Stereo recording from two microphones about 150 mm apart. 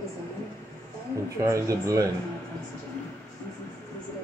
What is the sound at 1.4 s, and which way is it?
Speech, 20° right (ahead or behind).